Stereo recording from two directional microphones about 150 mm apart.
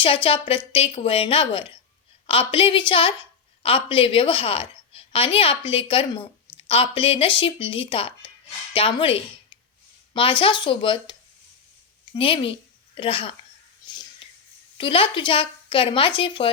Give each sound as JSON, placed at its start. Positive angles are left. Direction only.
{"t": 0.0, "sound": "a woman's voice", "side_deg": 35}
{"t": 12.1, "sound": "speech", "side_deg": 35}
{"t": 14.2, "sound": "whispering", "side_deg": 35}
{"t": 14.8, "sound": "speech", "side_deg": 35}